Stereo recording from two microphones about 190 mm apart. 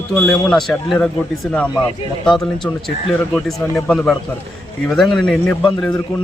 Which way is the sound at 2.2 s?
Centre (ahead or behind).